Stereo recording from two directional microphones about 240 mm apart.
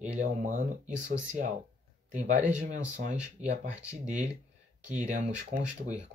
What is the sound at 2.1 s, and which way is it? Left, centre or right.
Speech, right.